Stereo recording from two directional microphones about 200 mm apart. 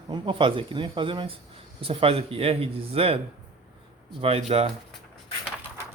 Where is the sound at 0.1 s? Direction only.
25° right (ahead or behind).